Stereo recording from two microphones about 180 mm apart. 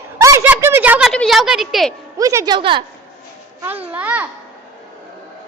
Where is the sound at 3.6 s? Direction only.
10° right (ahead or behind).